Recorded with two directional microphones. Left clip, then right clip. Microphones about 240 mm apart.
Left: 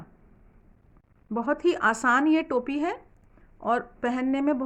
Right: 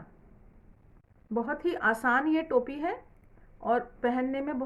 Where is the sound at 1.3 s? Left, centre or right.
Left.